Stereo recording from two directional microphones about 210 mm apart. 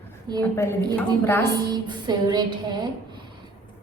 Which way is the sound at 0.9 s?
10° left (ahead or behind).